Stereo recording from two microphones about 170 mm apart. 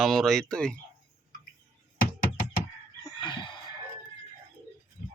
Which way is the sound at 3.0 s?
25° left (ahead or behind).